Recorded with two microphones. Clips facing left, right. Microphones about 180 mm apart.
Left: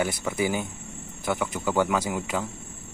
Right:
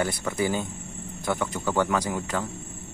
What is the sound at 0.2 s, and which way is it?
Speech, 10° left (ahead or behind).